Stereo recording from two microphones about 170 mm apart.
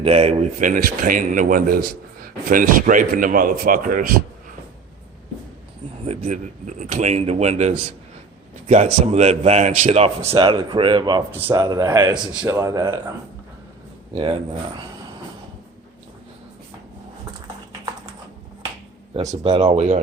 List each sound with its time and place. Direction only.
0.0 s speech: 35° right (ahead or behind)
0.7 s a man's voice: 55° right (ahead or behind)
6.1 s speech: 40° right (ahead or behind)
10.3 s speech: 30° right (ahead or behind)
12.1 s speech: 5° right (ahead or behind)
12.5 s speech: 20° right (ahead or behind)
14.1 s speech: 30° right (ahead or behind)
19.3 s speech: 35° right (ahead or behind)